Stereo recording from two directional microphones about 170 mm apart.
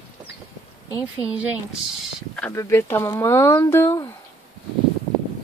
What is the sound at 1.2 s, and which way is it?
Speech, 10° right (ahead or behind).